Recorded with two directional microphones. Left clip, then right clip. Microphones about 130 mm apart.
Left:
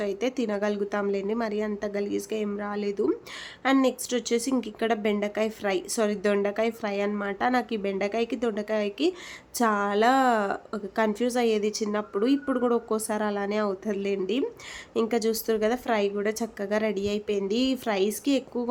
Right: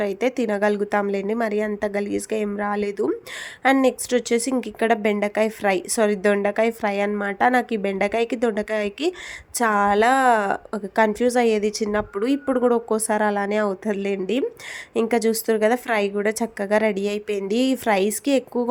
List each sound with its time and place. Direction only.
0.0 s a woman's voice: 40° right (ahead or behind)